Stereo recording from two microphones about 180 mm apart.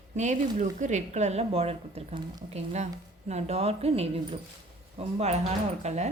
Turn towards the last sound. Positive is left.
turn(degrees=-40)  # may be behind; listen again after turning